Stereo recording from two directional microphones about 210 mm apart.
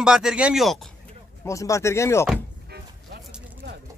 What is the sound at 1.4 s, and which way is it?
Speech, 15° left (ahead or behind).